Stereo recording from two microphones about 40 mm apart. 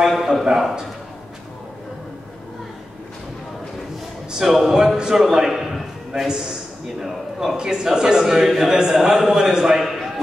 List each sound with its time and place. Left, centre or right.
0.0 s a man's voice: centre
4.5 s a man's voice: centre